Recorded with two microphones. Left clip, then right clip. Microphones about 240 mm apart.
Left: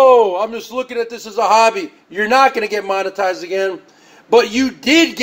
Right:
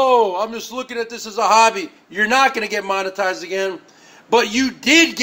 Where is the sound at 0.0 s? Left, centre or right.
Centre.